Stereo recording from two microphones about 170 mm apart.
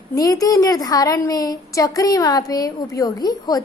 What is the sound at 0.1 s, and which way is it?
A woman's voice, 20° left (ahead or behind).